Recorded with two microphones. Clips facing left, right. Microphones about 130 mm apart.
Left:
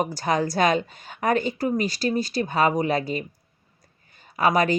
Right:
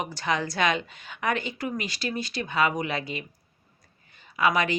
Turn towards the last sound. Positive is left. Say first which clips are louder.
# left 4 dB
turn(degrees=40)  # may be behind; listen again after turning